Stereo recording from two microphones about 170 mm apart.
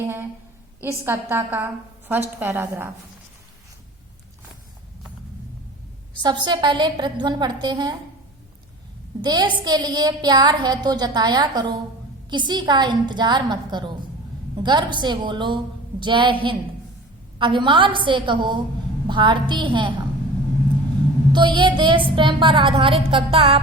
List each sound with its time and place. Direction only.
0.0 s a sound: 15° right (ahead or behind)
0.8 s a woman's voice: 15° right (ahead or behind)
6.2 s a woman's voice: 25° right (ahead or behind)
9.2 s a woman's voice: 25° right (ahead or behind)
21.3 s a woman's voice: 25° right (ahead or behind)